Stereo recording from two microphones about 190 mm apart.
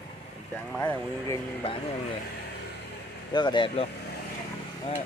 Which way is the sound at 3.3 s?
25° left (ahead or behind).